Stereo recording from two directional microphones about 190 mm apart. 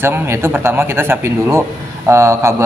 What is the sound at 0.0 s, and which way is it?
A man's voice, 10° right (ahead or behind).